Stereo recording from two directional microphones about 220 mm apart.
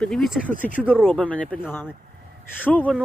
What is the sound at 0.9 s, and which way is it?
Speech, 10° left (ahead or behind).